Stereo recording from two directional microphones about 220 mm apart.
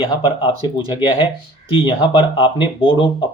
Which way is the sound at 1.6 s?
25° left (ahead or behind).